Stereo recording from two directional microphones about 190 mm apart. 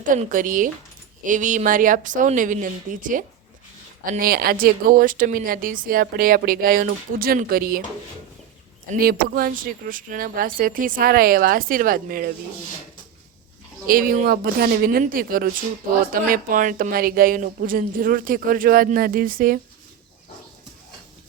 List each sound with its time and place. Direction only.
0.0 s speech: 45° right (ahead or behind)
9.0 s speech: 50° right (ahead or behind)
13.8 s speech: 50° right (ahead or behind)